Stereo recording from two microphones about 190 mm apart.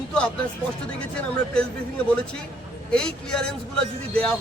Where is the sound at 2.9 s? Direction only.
5° left (ahead or behind).